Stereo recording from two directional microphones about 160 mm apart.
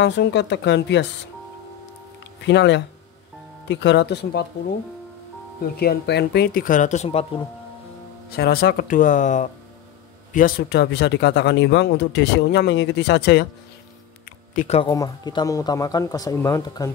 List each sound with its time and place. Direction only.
0.0 s speech: 90° left
2.4 s speech: 90° left
5.8 s speech: 85° left; by 7.4 s 35° left (ahead or behind)
8.4 s speech: 80° left; by 9.5 s 50° left (ahead or behind)
10.3 s speech: 75° left (ahead or behind)
14.5 s speech: 55° left (ahead or behind)
14.8 s speech: 25° left (ahead or behind)